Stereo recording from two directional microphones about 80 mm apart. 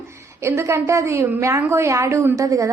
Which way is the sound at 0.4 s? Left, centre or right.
Right.